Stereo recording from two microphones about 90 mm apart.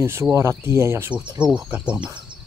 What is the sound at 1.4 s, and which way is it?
Speech, 10° right (ahead or behind).